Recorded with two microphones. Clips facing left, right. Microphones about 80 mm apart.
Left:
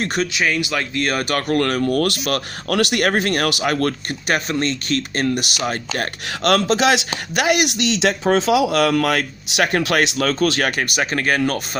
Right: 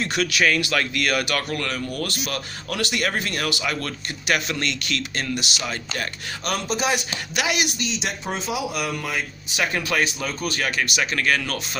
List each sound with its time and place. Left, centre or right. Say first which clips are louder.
0.2 s speech: right 1 dB; left
1.0 s speech: left 3 dB; left
4.4 s speech: left 5 dB; left
6.4 s speech: left 9 dB; left
7.3 s speech: left 7 dB; left
10.6 s speech: left 4 dB; left